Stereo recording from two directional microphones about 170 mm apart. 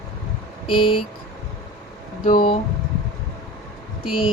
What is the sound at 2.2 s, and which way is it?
Speech, 55° left (ahead or behind).